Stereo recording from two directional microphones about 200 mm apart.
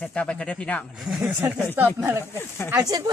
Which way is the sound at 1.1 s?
10° right (ahead or behind).